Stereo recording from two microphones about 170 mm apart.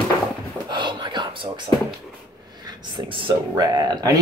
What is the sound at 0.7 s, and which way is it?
Whispering, 25° right (ahead or behind).